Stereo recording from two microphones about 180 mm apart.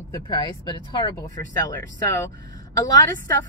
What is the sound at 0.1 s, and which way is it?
Speech, 25° left (ahead or behind).